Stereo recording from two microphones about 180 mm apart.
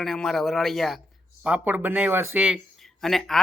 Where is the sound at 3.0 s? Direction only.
Centre (ahead or behind).